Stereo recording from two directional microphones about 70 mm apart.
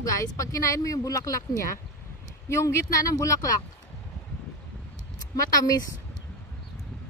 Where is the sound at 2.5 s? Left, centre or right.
Left.